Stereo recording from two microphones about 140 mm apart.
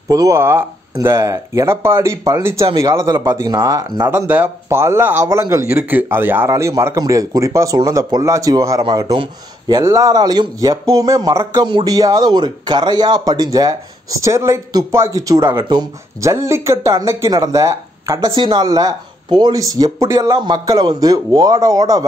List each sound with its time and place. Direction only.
0.1 s speech: 25° right (ahead or behind)
4.1 s speech: 15° right (ahead or behind)